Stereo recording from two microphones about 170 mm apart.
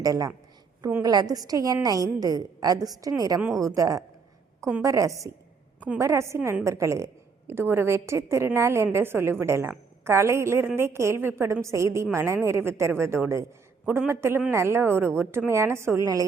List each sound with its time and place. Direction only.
0.0 s a woman's voice: 20° right (ahead or behind)
1.0 s a woman's voice: 20° right (ahead or behind)